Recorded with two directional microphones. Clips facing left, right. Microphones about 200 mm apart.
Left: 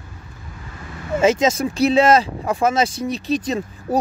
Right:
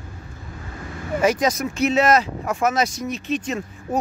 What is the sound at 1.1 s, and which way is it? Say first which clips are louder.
Speech: left 3 dB; 25° left (ahead or behind).